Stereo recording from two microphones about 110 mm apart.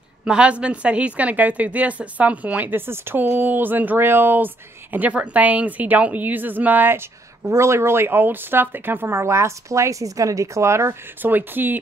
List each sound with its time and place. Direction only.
0.2 s a woman's voice: 10° right (ahead or behind)